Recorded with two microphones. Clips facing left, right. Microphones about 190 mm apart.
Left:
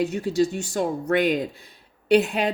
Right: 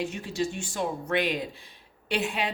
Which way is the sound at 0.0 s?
40° left (ahead or behind).